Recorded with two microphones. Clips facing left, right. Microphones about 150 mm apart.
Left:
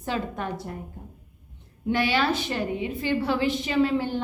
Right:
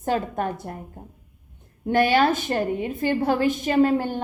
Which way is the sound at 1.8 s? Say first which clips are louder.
Right 5 dB; 50° right (ahead or behind).